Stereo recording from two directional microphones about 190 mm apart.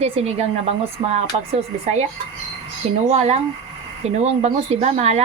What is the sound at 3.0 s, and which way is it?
Speech, 35° right (ahead or behind).